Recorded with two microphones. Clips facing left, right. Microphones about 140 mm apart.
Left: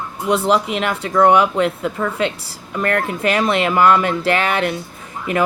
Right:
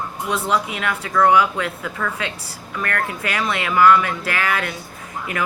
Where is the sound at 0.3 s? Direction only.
30° left (ahead or behind).